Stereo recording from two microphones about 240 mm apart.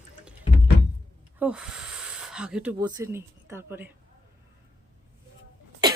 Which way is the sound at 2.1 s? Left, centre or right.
Centre.